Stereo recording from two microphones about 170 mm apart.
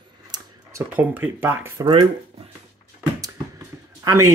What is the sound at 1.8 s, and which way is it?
Speech, 30° right (ahead or behind).